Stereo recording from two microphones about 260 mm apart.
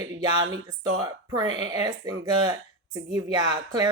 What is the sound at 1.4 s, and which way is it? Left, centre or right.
Speech, right.